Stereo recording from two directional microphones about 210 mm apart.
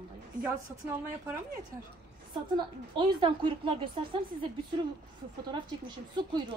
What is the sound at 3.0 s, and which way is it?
Speech, 25° right (ahead or behind).